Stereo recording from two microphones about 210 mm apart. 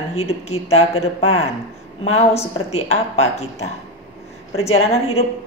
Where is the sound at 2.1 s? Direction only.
30° left (ahead or behind).